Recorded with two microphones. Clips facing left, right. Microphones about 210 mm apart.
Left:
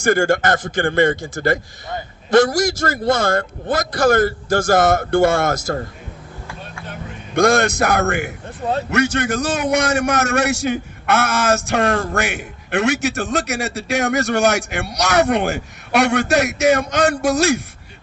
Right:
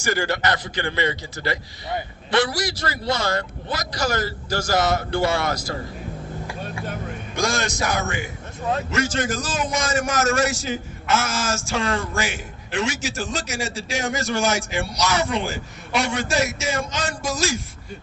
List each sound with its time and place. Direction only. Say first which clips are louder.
0.0 s a man's voice: left 7 dB; 50° left (ahead or behind)
7.3 s a man's voice: left 10 dB; 60° left (ahead or behind)